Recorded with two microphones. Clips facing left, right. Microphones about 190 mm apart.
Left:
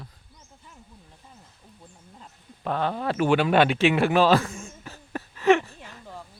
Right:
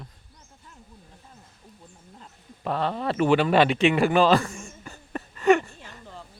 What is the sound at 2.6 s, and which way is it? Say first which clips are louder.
Speech: even; centre (ahead or behind).